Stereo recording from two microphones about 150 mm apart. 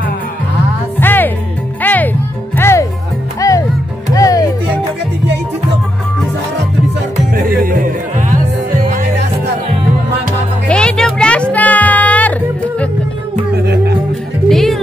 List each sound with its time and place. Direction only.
0.9 s music: 15° left (ahead or behind)
7.3 s music: 70° right (ahead or behind)
10.7 s music: 5° left (ahead or behind)
14.5 s music: centre (ahead or behind)